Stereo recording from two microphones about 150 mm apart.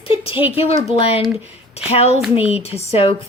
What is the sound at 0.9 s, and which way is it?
A woman's voice, 40° left (ahead or behind).